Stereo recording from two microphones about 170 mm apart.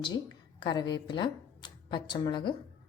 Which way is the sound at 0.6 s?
25° left (ahead or behind).